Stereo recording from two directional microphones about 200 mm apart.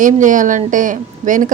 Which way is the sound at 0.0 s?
40° right (ahead or behind).